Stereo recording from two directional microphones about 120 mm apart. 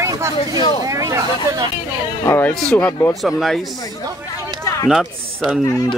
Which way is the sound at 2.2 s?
20° left (ahead or behind).